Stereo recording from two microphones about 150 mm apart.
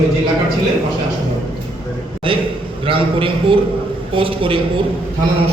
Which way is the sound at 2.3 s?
35° right (ahead or behind).